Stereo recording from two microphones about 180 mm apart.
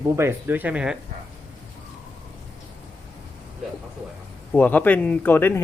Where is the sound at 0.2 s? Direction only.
10° right (ahead or behind).